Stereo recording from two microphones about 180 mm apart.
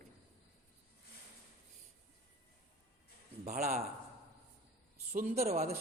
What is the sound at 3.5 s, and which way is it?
Speech, 40° right (ahead or behind).